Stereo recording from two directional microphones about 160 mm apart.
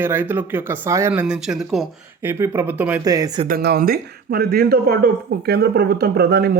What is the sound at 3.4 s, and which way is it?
Speech, 75° right (ahead or behind).